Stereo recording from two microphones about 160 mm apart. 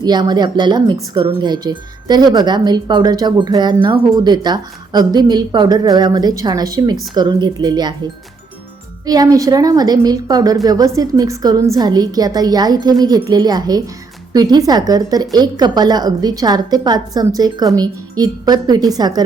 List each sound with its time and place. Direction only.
0.0 s speech: 25° right (ahead or behind)
9.0 s speech: 25° right (ahead or behind)